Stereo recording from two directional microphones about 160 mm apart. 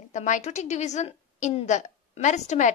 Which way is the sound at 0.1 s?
50° left (ahead or behind).